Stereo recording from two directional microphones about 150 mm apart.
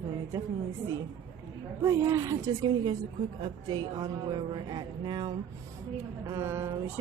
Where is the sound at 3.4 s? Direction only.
30° right (ahead or behind).